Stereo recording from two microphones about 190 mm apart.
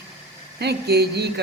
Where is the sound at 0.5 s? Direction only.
60° right (ahead or behind).